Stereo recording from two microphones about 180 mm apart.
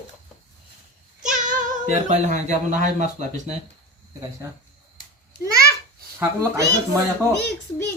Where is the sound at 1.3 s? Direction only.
45° right (ahead or behind).